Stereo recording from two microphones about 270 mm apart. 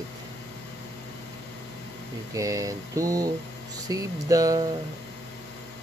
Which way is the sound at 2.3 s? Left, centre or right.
Centre.